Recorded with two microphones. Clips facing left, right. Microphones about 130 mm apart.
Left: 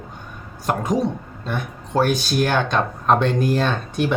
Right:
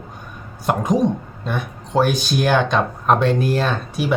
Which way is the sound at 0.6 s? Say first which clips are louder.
Right 3 dB; 15° right (ahead or behind).